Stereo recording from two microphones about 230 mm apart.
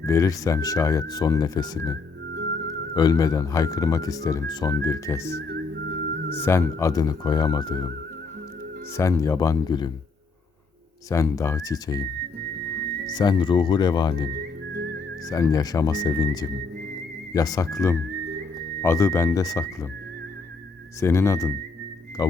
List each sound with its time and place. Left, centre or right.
0.0 s speech: centre
9.0 s speech: centre
11.1 s speech: centre
13.1 s speech: centre
15.3 s speech: centre
21.0 s speech: centre
22.2 s music: centre